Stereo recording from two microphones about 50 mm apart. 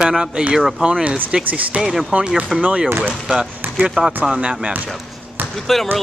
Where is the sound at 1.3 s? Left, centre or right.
Centre.